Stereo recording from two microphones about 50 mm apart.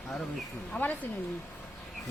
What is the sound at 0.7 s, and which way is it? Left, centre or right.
Speech, left.